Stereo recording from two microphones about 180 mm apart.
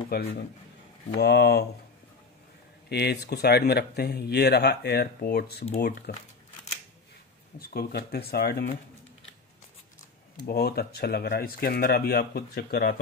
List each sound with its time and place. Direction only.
0.1 s speech: 60° left (ahead or behind)
2.9 s speech: 65° left (ahead or behind)
7.5 s speech: 60° left (ahead or behind)
10.4 s speech: 60° left (ahead or behind)